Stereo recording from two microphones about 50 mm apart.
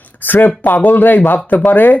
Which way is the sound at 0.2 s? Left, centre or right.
Left.